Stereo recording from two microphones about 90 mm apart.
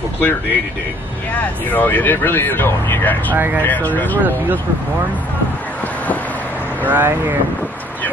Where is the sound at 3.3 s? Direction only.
20° right (ahead or behind).